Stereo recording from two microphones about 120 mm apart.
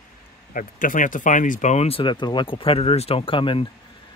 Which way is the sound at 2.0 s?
40° left (ahead or behind).